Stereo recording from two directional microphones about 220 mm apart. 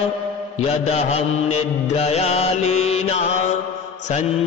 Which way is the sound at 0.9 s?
30° left (ahead or behind).